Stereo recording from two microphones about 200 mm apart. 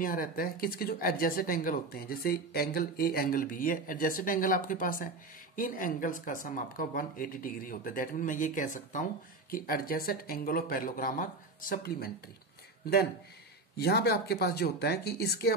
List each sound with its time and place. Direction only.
0.0 s speech: 45° left (ahead or behind)
13.7 s speech: 55° left (ahead or behind)